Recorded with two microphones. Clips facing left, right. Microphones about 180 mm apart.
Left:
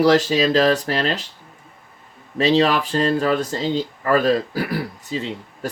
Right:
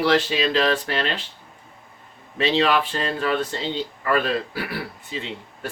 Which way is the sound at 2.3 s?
40° left (ahead or behind).